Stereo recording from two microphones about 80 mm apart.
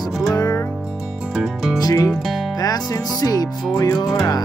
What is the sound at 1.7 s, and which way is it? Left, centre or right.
Music, left.